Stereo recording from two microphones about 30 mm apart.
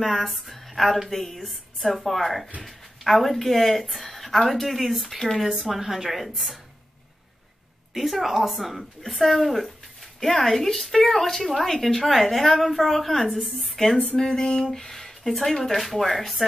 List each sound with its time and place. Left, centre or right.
0.0 s a woman's voice: centre
5.4 s a woman's voice: centre
7.9 s a woman's voice: centre
14.3 s a sound: left
15.2 s a woman's voice: centre